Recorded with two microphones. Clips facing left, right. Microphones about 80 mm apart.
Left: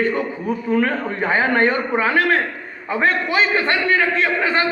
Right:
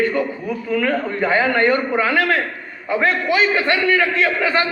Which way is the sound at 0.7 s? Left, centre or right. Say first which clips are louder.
Right 1 dB; left.